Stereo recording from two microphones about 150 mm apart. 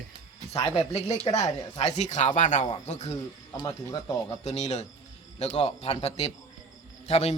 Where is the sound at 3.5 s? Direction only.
20° left (ahead or behind).